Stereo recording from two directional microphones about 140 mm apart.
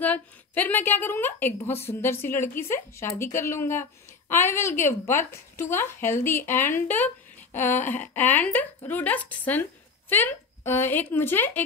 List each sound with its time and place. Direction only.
0.0 s speech: 10° left (ahead or behind)